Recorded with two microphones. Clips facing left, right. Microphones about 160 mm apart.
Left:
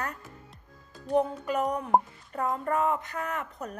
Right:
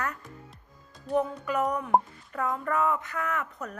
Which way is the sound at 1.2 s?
30° left (ahead or behind).